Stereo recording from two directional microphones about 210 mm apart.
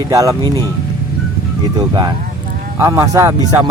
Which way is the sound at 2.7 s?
15° right (ahead or behind).